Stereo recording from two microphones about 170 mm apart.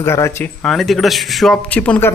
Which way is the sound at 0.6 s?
Centre (ahead or behind).